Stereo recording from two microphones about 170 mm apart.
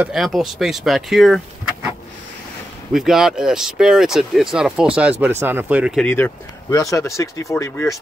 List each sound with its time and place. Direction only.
0.0 s speech: centre (ahead or behind)
2.9 s speech: centre (ahead or behind)
5.9 s speech: 10° left (ahead or behind)